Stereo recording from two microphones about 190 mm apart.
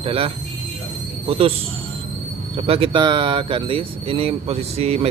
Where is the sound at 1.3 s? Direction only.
30° right (ahead or behind).